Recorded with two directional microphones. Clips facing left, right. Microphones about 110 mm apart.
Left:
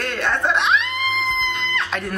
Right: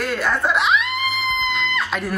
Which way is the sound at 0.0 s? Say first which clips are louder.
Right 1 dB; 5° right (ahead or behind).